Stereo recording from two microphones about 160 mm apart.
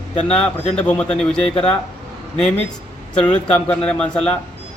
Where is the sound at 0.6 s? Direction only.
40° left (ahead or behind).